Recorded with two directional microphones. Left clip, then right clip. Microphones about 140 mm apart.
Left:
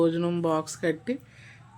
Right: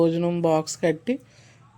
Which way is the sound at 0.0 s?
20° right (ahead or behind).